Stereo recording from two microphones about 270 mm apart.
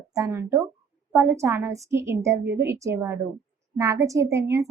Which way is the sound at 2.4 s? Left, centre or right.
Right.